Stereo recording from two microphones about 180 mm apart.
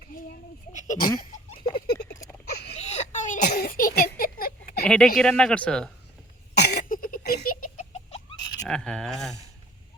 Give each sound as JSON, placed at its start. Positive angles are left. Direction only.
{"t": 0.7, "sound": "speech", "side_deg": 40}
{"t": 1.9, "sound": "a sound", "side_deg": 65}
{"t": 2.7, "sound": "baby cry", "side_deg": 40}
{"t": 3.4, "sound": "a sound", "side_deg": 60}
{"t": 4.9, "sound": "speech", "side_deg": 5}
{"t": 6.5, "sound": "cough", "side_deg": 65}
{"t": 7.9, "sound": "chicken", "side_deg": 35}
{"t": 8.6, "sound": "speech", "side_deg": 5}